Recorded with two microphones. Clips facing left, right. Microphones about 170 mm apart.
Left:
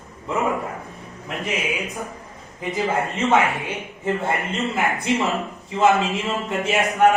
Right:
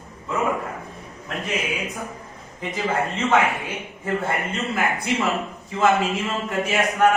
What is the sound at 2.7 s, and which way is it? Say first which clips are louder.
A man's voice: left 1 dB; 20° left (ahead or behind).